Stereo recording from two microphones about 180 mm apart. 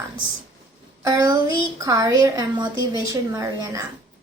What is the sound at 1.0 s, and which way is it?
A woman's voice, 20° right (ahead or behind).